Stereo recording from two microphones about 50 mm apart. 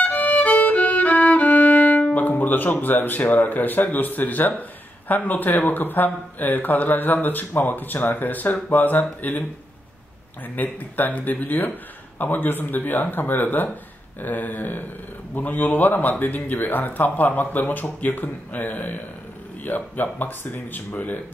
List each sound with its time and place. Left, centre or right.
0.0 s violin: left
9.2 s speech: left
10.5 s speech: left